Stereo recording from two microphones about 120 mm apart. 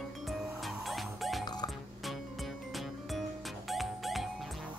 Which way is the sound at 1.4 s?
35° left (ahead or behind).